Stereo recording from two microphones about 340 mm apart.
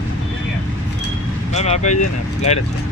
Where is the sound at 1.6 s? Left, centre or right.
Centre.